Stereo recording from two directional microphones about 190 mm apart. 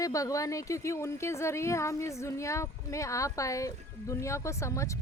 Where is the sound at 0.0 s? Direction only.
15° left (ahead or behind).